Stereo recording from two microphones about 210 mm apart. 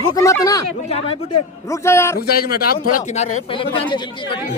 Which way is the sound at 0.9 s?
30° left (ahead or behind).